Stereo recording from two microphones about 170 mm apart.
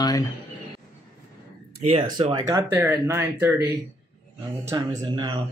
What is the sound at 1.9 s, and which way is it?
Speech, 30° right (ahead or behind).